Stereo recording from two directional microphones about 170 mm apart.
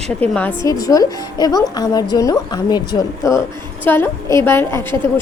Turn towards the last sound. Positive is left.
turn(degrees=15)  # may be behind; listen again after turning